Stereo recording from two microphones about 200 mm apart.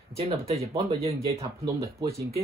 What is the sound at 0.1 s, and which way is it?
Speech, 30° right (ahead or behind).